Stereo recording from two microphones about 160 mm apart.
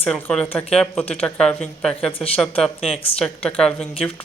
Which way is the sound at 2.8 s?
35° left (ahead or behind).